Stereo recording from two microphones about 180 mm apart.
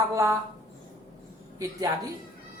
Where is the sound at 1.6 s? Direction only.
20° right (ahead or behind).